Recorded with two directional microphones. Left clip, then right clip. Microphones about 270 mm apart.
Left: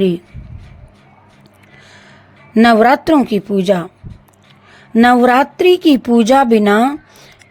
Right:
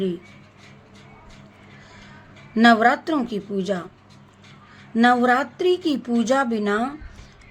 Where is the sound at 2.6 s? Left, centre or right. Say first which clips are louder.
Left 7 dB; left.